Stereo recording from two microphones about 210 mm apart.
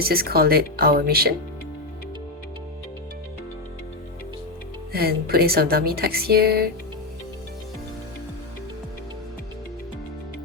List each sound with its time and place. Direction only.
0.0 s speech: 45° right (ahead or behind)
4.9 s speech: 45° right (ahead or behind)